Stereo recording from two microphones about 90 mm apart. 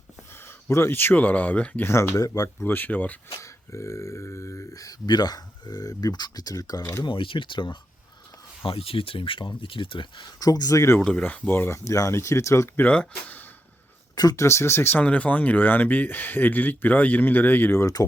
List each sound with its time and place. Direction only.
0.4 s speech: 30° left (ahead or behind)
1.8 s speech: 30° left (ahead or behind)
2.6 s speech: 20° left (ahead or behind)
3.4 s speech: 30° left (ahead or behind)
7.0 s speech: 70° left (ahead or behind)
8.6 s speech: 90° left; by 10.9 s 35° left (ahead or behind)
11.0 s speech: 15° left (ahead or behind)
11.9 s speech: 35° left (ahead or behind)
12.9 s speech: 15° left (ahead or behind)
14.2 s speech: 45° left (ahead or behind)
14.4 s speech: 30° left (ahead or behind)
15.0 s speech: 15° left (ahead or behind)